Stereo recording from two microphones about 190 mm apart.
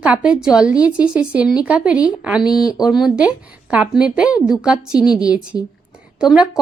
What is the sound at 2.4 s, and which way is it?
Speech, 20° left (ahead or behind).